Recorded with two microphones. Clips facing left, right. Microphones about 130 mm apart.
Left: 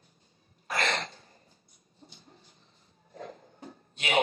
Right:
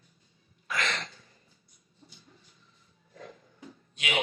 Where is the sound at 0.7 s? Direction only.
40° left (ahead or behind).